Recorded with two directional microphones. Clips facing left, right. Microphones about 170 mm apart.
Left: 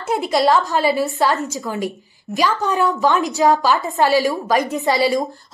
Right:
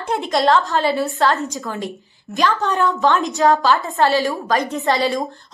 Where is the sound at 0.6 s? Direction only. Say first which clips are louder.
Left 1 dB; 15° left (ahead or behind).